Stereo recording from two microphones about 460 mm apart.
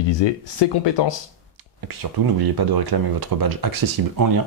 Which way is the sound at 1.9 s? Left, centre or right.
Right.